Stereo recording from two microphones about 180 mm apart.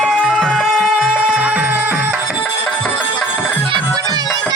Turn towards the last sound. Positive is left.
turn(degrees=-20)  # may be behind; listen again after turning